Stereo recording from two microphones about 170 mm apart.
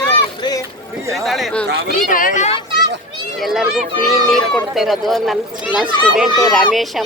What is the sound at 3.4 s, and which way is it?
Speech, 5° right (ahead or behind).